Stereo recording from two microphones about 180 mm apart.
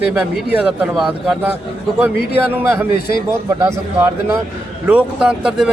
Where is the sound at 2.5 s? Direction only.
10° right (ahead or behind).